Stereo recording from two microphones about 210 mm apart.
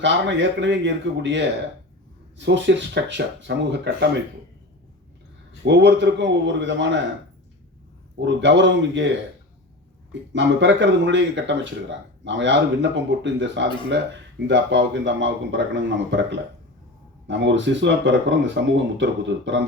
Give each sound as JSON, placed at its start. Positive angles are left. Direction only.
{"t": 0.0, "sound": "speech", "side_deg": -60}
{"t": 5.6, "sound": "speech", "side_deg": -55}
{"t": 8.2, "sound": "speech", "side_deg": -60}